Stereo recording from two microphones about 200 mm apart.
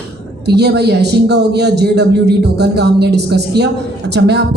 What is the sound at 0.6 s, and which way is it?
A man's voice, 55° right (ahead or behind).